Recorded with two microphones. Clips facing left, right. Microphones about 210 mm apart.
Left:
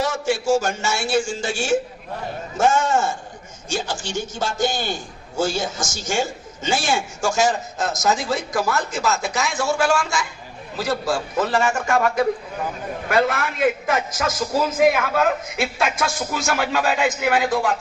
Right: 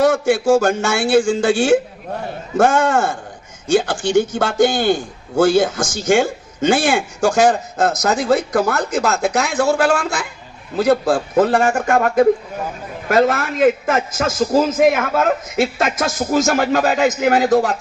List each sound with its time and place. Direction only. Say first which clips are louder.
0.0 s a man's voice: right 8 dB; 55° right (ahead or behind); by 17.7 s 40° right (ahead or behind)